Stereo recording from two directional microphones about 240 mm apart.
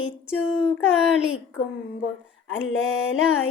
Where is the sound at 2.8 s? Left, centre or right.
Left.